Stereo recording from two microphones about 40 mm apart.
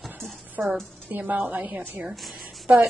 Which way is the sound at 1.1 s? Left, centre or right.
Right.